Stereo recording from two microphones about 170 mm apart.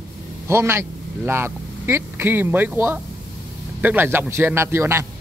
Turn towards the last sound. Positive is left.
turn(degrees=-15)  # may be behind; listen again after turning